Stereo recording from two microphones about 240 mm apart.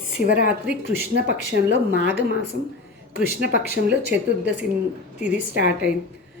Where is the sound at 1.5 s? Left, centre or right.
Right.